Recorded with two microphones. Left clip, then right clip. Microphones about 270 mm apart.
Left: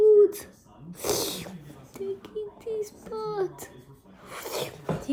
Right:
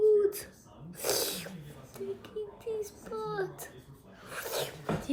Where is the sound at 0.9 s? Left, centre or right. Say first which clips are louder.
Left 3 dB; left.